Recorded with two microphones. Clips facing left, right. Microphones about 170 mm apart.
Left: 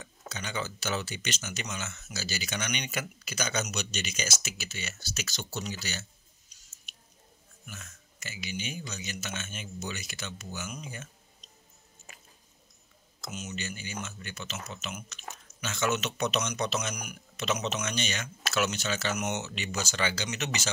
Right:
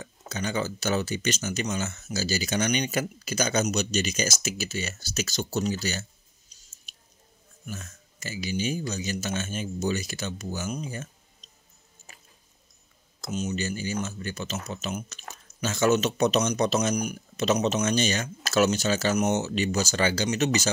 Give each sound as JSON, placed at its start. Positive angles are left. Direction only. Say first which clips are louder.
{"t": 0.0, "sound": "speech", "louder": "right 8 dB", "side_deg": -40}
{"t": 6.5, "sound": "a sound", "louder": "right 3 dB", "side_deg": -30}
{"t": 7.6, "sound": "speech", "louder": "right 9 dB", "side_deg": -40}
{"t": 13.2, "sound": "speech", "louder": "right 9 dB", "side_deg": -30}